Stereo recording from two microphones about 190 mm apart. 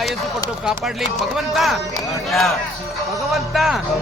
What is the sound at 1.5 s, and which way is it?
Speech, centre (ahead or behind).